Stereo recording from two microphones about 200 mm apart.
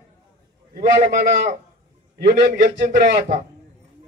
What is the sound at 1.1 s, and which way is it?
A man's voice, 55° right (ahead or behind).